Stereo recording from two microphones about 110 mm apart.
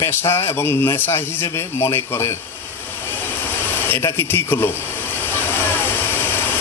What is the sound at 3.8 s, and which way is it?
Speech, 20° left (ahead or behind).